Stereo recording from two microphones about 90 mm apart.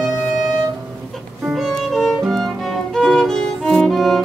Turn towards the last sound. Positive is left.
turn(degrees=0)  # may be behind; listen again after turning